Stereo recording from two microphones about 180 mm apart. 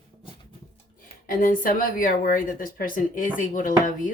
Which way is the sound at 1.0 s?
50° left (ahead or behind).